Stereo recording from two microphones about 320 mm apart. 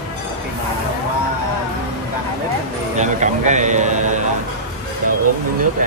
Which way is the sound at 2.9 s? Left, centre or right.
Right.